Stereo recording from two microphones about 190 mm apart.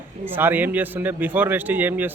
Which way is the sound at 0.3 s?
10° right (ahead or behind).